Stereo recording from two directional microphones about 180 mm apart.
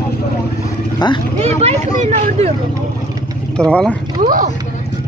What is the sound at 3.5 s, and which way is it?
Speech, 5° left (ahead or behind).